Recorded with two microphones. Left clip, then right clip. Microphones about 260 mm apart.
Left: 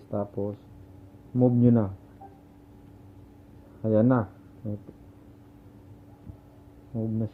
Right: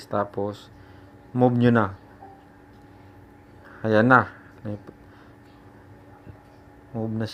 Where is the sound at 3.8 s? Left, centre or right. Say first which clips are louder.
Right 6 dB; right.